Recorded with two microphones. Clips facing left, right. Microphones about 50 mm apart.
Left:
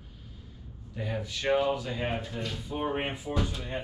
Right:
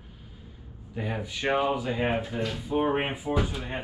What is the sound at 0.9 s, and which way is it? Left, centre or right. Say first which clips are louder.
Speech: right 2 dB; centre.